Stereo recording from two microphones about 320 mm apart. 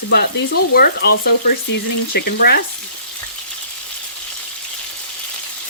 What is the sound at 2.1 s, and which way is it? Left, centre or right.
Speech, left.